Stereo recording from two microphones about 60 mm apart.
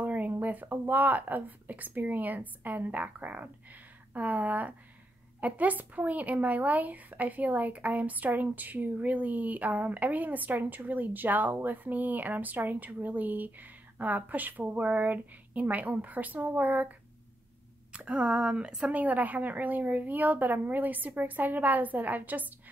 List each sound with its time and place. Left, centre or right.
0.0 s speech: right
17.9 s speech: centre
18.9 s speech: right